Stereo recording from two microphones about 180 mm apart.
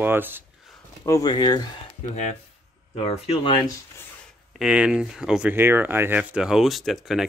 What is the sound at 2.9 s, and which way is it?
Speech, 30° left (ahead or behind).